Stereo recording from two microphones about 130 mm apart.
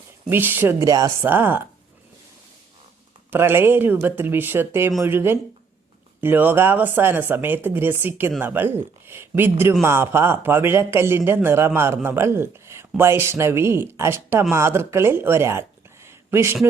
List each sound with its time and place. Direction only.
0.3 s speech: 15° right (ahead or behind)
0.8 s speech: 25° right (ahead or behind)
1.2 s speech: 15° right (ahead or behind)
3.2 s speech: 15° right (ahead or behind)
16.0 s a sound: 20° right (ahead or behind)